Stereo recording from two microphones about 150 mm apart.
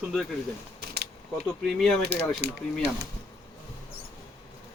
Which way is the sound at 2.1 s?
90° right.